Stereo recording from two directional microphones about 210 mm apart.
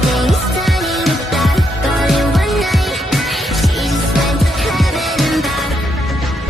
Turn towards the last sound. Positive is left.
turn(degrees=0)  # may be behind; listen again after turning